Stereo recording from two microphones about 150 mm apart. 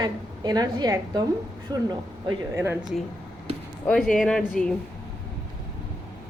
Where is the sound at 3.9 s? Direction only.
Centre (ahead or behind).